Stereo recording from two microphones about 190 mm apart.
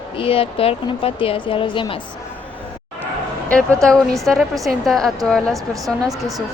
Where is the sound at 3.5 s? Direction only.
5° left (ahead or behind).